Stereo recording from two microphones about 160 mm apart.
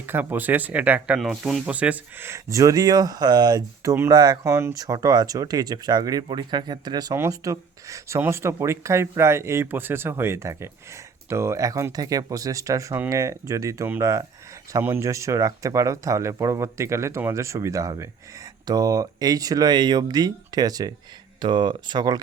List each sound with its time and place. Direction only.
0.0 s speech: 15° right (ahead or behind)